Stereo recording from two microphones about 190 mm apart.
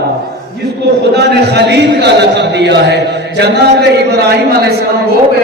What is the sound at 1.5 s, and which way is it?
Speech, 60° right (ahead or behind).